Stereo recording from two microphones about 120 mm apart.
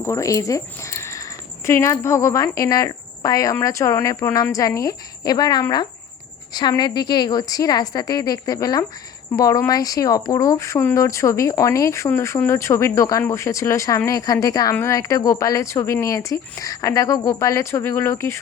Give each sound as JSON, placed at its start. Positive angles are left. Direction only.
{"t": 0.0, "sound": "a woman's voice", "side_deg": 25}